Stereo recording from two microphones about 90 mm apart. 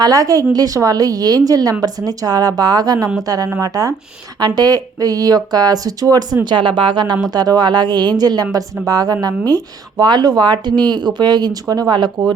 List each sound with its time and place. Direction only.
0.0 s speech: 40° right (ahead or behind)
6.4 s speech: 65° right (ahead or behind)